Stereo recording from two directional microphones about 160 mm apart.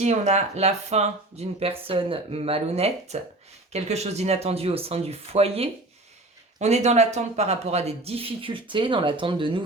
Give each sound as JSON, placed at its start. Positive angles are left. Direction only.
{"t": 0.0, "sound": "speech", "side_deg": -45}